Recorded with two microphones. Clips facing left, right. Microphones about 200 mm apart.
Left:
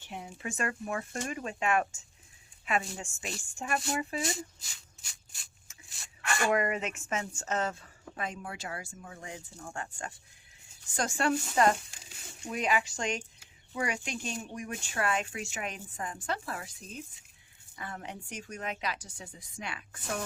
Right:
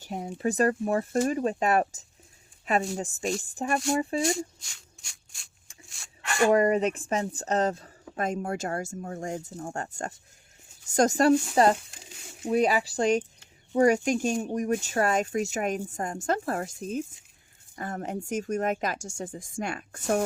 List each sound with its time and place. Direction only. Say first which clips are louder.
0.0 s speech: right 11 dB; 40° right (ahead or behind)
4.3 s a sound: right 8 dB; centre (ahead or behind)
6.5 s speech: right 9 dB; 35° right (ahead or behind)